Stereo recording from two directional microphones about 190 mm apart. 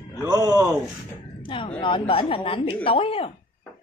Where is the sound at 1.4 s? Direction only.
25° left (ahead or behind).